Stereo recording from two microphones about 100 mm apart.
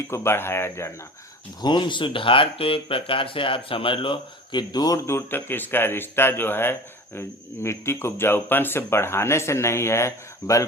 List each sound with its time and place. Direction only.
0.1 s speech: 25° left (ahead or behind)
1.6 s speech: 50° left (ahead or behind)
4.7 s speech: 40° left (ahead or behind)
5.0 s speech: 25° left (ahead or behind)